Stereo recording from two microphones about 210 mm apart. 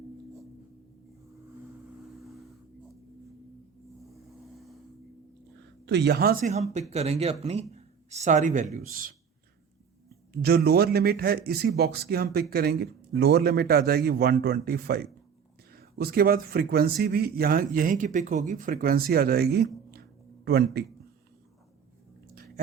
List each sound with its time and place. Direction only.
2.2 s a sound: centre (ahead or behind)
4.0 s vehicle: centre (ahead or behind)
5.8 s speech: 55° right (ahead or behind)
6.5 s a man's voice: 30° right (ahead or behind); by 20.8 s 50° right (ahead or behind)